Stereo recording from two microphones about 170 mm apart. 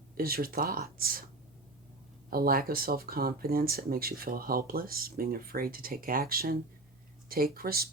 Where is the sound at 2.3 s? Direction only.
60° right (ahead or behind).